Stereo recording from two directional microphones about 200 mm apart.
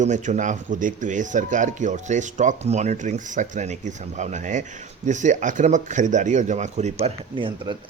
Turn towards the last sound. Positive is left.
turn(degrees=-25)  # may be behind; listen again after turning